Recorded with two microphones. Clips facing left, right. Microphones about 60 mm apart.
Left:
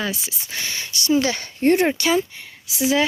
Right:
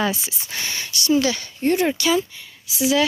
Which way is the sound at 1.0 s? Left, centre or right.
Left.